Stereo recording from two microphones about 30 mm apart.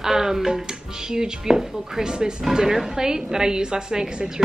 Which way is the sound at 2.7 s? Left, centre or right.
Centre.